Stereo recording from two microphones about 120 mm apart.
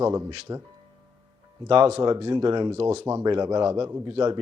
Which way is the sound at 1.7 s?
50° right (ahead or behind).